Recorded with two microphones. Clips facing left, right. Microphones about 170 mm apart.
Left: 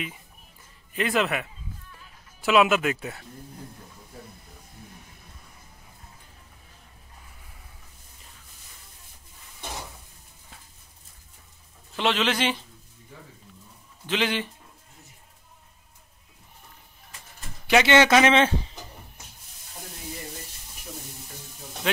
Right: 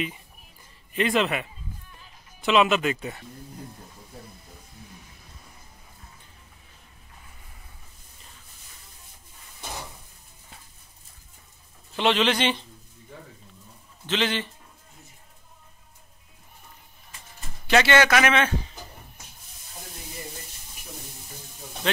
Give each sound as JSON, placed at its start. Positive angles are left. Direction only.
{"t": 0.9, "sound": "speech", "side_deg": 5}
{"t": 11.9, "sound": "speech", "side_deg": 0}
{"t": 14.0, "sound": "a man's voice", "side_deg": 10}
{"t": 17.6, "sound": "a man's voice", "side_deg": 15}
{"t": 21.8, "sound": "a man's voice", "side_deg": 10}